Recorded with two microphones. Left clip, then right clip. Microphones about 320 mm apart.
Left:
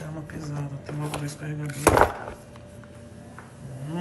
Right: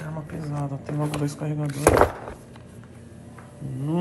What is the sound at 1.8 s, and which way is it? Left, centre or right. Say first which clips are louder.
Speech: right 1 dB; centre.